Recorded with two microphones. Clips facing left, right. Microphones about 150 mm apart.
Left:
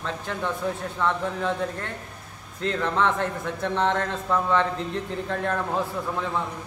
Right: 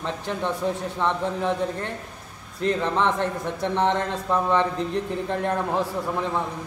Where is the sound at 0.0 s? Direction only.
20° right (ahead or behind).